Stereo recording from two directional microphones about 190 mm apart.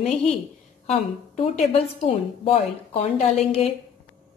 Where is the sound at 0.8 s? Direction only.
35° left (ahead or behind).